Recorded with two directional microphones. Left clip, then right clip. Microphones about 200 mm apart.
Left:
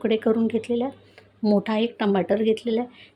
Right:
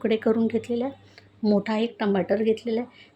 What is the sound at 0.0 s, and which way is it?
Speech, 5° left (ahead or behind).